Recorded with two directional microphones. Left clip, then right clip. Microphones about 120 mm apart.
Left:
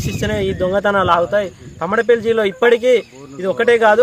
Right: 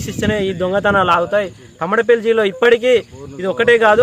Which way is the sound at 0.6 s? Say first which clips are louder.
Right 1 dB; 5° right (ahead or behind).